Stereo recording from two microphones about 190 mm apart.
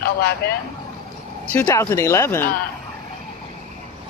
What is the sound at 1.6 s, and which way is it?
Speech, 15° left (ahead or behind).